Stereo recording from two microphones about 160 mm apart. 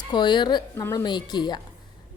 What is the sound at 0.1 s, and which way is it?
A woman's voice, 30° left (ahead or behind).